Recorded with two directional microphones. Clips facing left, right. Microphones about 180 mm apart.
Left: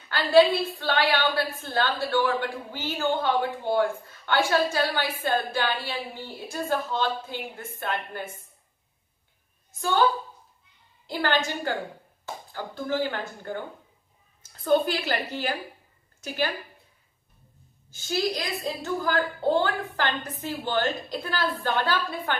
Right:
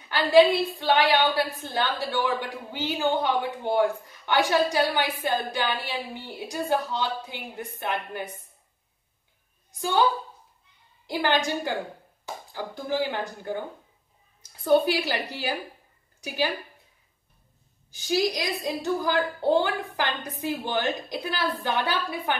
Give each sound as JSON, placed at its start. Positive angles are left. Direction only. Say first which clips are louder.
{"t": 0.1, "sound": "a woman's voice", "louder": "right 1 dB", "side_deg": -15}
{"t": 9.8, "sound": "a woman's voice", "louder": "even", "side_deg": -15}
{"t": 11.1, "sound": "a woman's voice", "louder": "right 1 dB", "side_deg": -15}
{"t": 17.8, "sound": "a woman's voice", "louder": "right 2 dB", "side_deg": -15}